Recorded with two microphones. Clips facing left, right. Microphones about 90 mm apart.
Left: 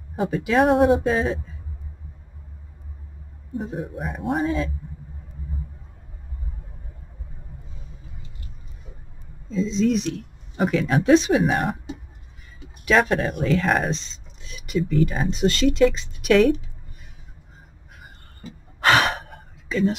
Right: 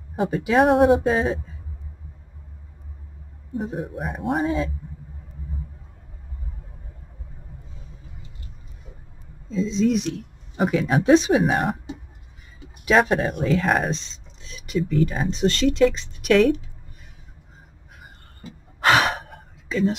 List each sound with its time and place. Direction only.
0.2 s speech: 25° right (ahead or behind)
0.6 s speech: 10° right (ahead or behind)
1.0 s speech: 20° right (ahead or behind)
3.7 s speech: 5° right (ahead or behind)
4.4 s speech: 20° right (ahead or behind)
9.5 s speech: centre (ahead or behind); by 11.7 s 25° right (ahead or behind)
12.7 s speech: 20° right (ahead or behind); by 16.5 s 5° left (ahead or behind)
18.8 s gasp: 5° right (ahead or behind)